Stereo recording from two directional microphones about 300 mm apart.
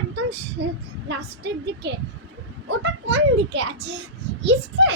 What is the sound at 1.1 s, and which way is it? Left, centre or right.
A child's voice, right.